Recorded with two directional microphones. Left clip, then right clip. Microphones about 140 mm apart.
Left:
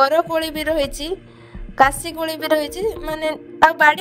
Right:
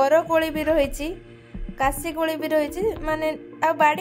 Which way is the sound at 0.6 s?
50° left (ahead or behind).